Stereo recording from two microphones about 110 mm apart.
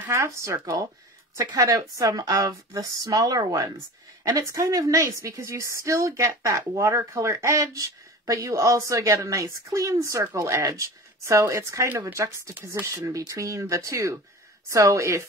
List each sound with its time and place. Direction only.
0.1 s a woman's voice: 25° right (ahead or behind)